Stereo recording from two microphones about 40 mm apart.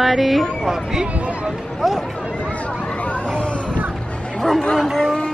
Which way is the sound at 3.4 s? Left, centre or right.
Left.